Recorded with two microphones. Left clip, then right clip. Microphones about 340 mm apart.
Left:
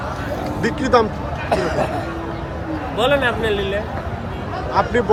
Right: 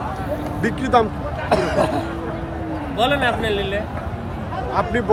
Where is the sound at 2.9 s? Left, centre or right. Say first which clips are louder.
Left 1 dB; centre.